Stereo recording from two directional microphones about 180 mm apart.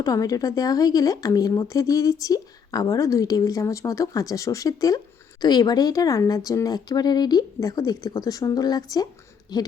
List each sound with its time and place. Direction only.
0.0 s speech: 20° left (ahead or behind)